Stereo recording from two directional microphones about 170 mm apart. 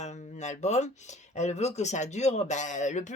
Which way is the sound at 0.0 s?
45° left (ahead or behind).